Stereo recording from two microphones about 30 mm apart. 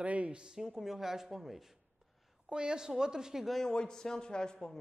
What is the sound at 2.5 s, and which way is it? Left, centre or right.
Speech, right.